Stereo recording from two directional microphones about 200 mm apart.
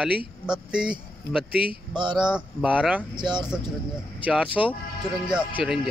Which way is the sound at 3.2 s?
20° right (ahead or behind).